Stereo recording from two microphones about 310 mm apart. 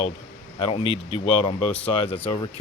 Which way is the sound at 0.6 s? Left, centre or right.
Centre.